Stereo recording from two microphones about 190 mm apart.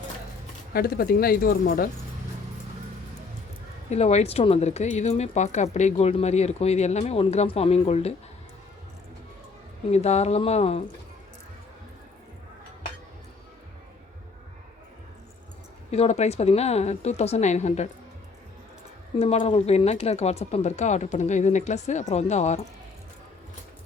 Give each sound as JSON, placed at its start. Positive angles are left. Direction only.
{"t": 0.7, "sound": "speech", "side_deg": 55}
{"t": 3.8, "sound": "speech", "side_deg": 35}
{"t": 9.9, "sound": "speech", "side_deg": 35}
{"t": 15.9, "sound": "speech", "side_deg": 35}
{"t": 19.2, "sound": "speech", "side_deg": 30}